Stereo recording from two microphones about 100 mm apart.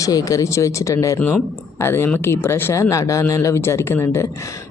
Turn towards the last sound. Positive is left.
turn(degrees=25)  # may be behind; listen again after turning